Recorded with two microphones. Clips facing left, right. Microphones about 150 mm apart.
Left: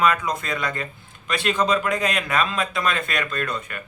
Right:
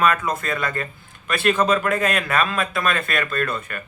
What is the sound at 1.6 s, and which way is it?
Speech, 55° right (ahead or behind).